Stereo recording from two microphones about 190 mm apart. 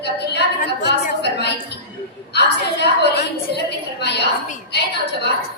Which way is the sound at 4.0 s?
60° left (ahead or behind).